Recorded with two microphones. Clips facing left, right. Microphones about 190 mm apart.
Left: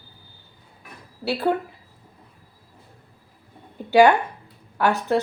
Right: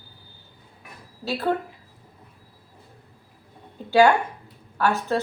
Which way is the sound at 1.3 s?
15° left (ahead or behind).